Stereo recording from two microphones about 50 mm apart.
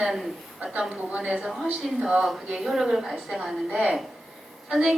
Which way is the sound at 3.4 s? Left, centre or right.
Centre.